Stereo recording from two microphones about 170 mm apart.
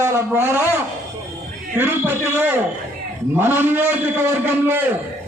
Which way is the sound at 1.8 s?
15° right (ahead or behind).